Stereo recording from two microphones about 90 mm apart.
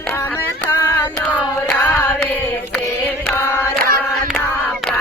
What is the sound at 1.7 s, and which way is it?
Singing, 25° left (ahead or behind).